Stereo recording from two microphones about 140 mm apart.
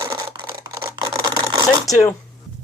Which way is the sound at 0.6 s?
25° right (ahead or behind).